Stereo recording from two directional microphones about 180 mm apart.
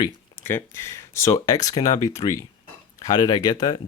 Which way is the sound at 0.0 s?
15° left (ahead or behind).